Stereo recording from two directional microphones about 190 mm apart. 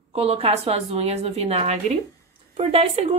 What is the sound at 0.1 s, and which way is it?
A woman's voice, 30° right (ahead or behind).